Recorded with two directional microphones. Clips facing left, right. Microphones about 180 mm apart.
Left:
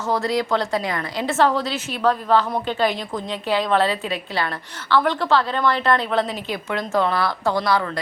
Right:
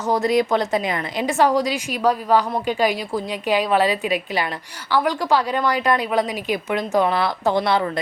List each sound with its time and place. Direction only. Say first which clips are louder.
0.0 s a woman's voice: right 3 dB; 20° right (ahead or behind)